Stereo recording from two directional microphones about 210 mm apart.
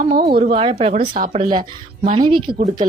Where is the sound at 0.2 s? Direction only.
45° right (ahead or behind).